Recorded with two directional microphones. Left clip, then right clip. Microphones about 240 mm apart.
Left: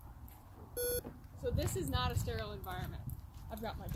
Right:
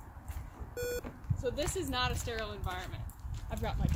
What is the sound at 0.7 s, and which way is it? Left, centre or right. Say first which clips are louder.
Beep: right 1 dB; left.